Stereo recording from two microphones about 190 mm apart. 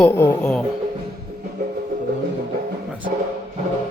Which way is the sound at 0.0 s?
10° left (ahead or behind).